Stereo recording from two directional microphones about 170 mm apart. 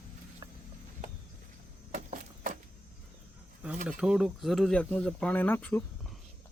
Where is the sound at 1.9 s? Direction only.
50° right (ahead or behind).